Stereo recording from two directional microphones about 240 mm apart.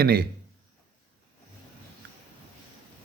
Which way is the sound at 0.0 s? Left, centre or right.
Right.